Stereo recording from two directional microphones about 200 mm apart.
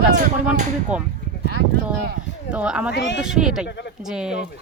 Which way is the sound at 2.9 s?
65° left (ahead or behind).